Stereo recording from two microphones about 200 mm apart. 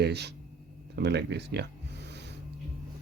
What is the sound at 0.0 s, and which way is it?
Speech, 55° right (ahead or behind).